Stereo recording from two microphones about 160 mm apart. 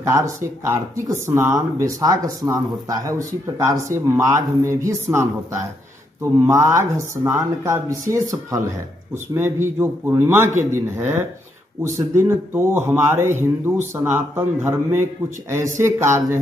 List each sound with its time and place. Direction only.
0.0 s speech: 20° right (ahead or behind)
6.4 s speech: 20° right (ahead or behind)
9.8 s a man's voice: 15° right (ahead or behind)